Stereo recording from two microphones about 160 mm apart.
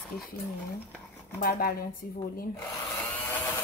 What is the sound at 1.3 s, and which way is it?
Speech, 65° left (ahead or behind).